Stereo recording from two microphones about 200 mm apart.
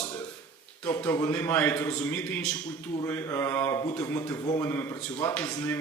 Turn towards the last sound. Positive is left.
turn(degrees=15)  # may be behind; listen again after turning